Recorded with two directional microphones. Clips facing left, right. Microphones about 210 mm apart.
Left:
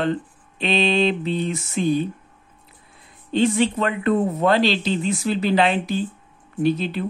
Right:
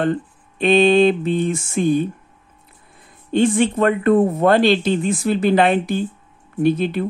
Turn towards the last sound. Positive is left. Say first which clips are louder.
# right 4 dB
turn(degrees=-50)  # may be behind; listen again after turning